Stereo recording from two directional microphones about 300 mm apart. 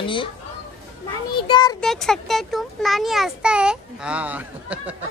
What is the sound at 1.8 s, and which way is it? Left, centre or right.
A child's voice, centre.